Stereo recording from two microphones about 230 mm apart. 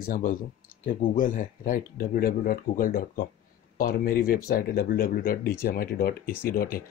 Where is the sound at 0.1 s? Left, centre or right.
Left.